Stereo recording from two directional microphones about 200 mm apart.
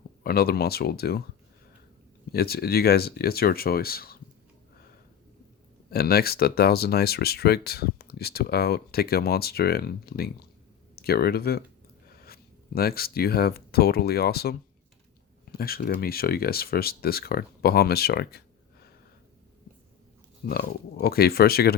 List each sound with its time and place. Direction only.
0.2 s speech: 50° left (ahead or behind)
2.3 s speech: 50° left (ahead or behind)
5.9 s speech: 50° left (ahead or behind)
15.5 s speech: 50° left (ahead or behind)
20.5 s speech: 50° left (ahead or behind)